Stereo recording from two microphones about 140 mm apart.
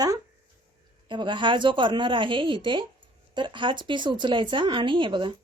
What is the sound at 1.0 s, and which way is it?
Speech, 35° right (ahead or behind).